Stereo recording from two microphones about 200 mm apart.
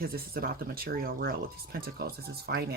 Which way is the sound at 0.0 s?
50° right (ahead or behind).